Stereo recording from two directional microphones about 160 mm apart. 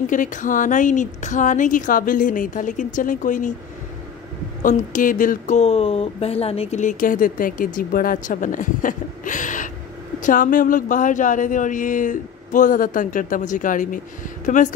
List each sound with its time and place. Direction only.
0.0 s speech: 55° left (ahead or behind)
4.6 s speech: 55° left (ahead or behind)
5.6 s speech: 40° left (ahead or behind)